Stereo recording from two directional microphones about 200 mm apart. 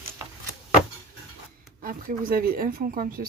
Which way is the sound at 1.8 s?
45° right (ahead or behind).